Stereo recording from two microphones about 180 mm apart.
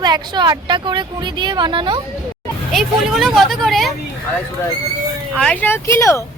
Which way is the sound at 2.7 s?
Centre (ahead or behind).